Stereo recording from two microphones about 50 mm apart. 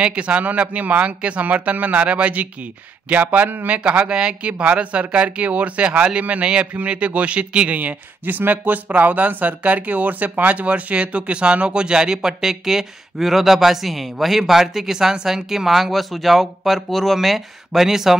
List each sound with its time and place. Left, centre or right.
0.0 s speech: right
3.7 s speech: right
7.8 s speech: right; by 18.1 s centre